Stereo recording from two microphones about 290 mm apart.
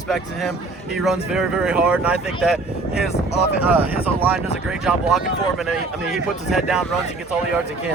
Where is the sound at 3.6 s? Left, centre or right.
Centre.